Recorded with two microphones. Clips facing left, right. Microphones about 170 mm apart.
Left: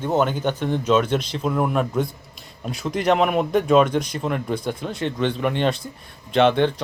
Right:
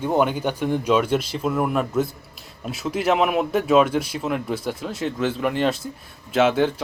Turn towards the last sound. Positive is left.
turn(degrees=-5)  # may be behind; listen again after turning